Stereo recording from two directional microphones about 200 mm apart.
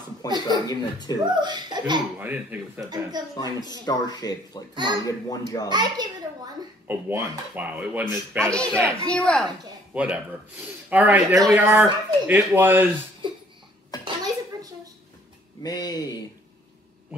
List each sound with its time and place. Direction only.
0.2 s a man's voice: 20° left (ahead or behind)
1.3 s speech: 20° right (ahead or behind)
2.1 s speech: 10° right (ahead or behind)
2.9 s speech: 20° right (ahead or behind)
3.3 s a man's voice: 20° left (ahead or behind)
5.7 s a sound: 20° right (ahead or behind)
6.9 s speech: 10° right (ahead or behind)
8.5 s speech: 5° left (ahead or behind)
13.2 s a sound: 25° right (ahead or behind)
15.6 s a man's voice: 20° left (ahead or behind)